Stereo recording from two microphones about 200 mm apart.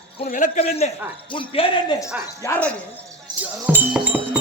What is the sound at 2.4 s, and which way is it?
Speech, 10° left (ahead or behind).